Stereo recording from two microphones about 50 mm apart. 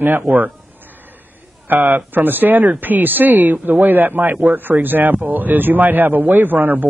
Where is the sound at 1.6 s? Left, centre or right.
Right.